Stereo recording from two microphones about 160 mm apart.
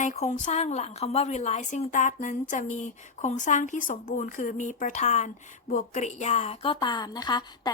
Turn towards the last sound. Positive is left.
turn(degrees=25)  # may be behind; listen again after turning